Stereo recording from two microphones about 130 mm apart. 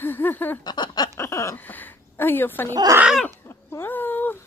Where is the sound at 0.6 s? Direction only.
35° left (ahead or behind).